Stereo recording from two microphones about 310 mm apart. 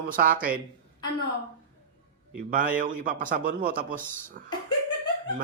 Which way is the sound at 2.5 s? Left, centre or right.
Right.